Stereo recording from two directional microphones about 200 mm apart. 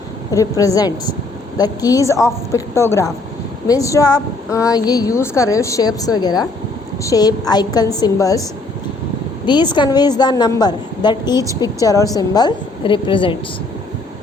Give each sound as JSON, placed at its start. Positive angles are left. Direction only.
{"t": 0.3, "sound": "a woman's voice", "side_deg": 15}
{"t": 9.5, "sound": "a woman's voice", "side_deg": 20}